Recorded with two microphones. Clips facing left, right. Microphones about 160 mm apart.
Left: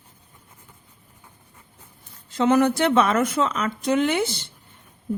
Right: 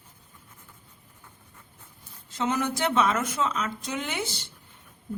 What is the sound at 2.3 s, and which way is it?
A woman's voice, 65° left (ahead or behind).